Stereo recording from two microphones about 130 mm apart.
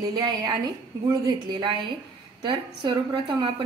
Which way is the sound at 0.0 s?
30° right (ahead or behind).